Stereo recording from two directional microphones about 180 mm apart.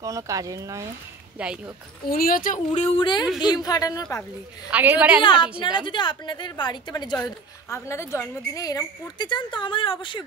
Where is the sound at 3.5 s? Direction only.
20° left (ahead or behind).